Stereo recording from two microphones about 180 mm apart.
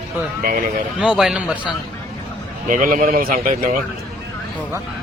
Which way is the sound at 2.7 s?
45° right (ahead or behind).